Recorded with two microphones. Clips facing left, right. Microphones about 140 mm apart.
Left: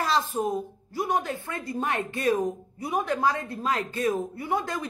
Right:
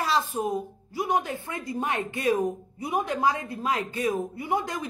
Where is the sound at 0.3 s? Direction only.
10° right (ahead or behind).